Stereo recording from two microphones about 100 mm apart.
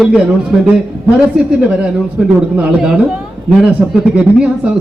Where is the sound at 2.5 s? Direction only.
10° right (ahead or behind).